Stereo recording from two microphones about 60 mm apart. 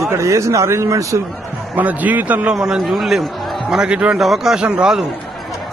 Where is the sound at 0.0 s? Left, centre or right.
Right.